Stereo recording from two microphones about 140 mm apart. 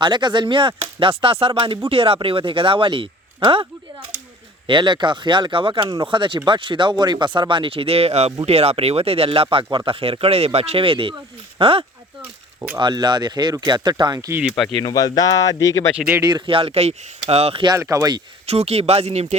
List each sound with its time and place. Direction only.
0.0 s speech: 35° right (ahead or behind)
12.8 s speech: 30° right (ahead or behind)
14.8 s speech: 30° left (ahead or behind)
16.0 s speech: 10° right (ahead or behind)
16.2 s speech: 35° right (ahead or behind)
17.7 s speech: 25° right (ahead or behind)
18.4 s speech: 45° right (ahead or behind)